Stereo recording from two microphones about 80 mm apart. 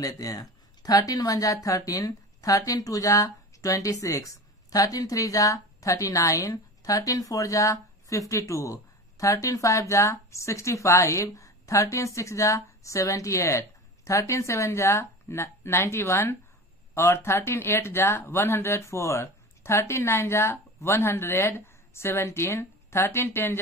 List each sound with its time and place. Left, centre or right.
0.0 s a woman's voice: left